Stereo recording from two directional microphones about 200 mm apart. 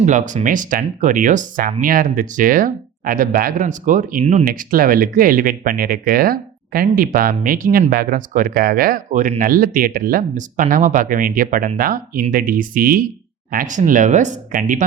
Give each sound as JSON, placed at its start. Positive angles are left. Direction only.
{"t": 0.0, "sound": "speech", "side_deg": -40}